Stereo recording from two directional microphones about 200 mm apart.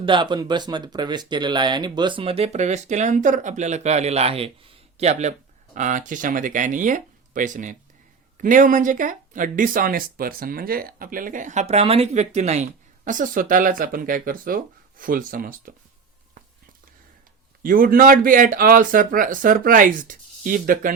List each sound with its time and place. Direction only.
0.0 s a man's voice: 25° right (ahead or behind); by 15.7 s 45° right (ahead or behind)
17.6 s a man's voice: 45° right (ahead or behind)